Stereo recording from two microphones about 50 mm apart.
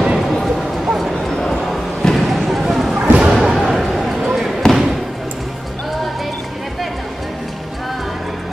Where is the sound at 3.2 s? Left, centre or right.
Centre.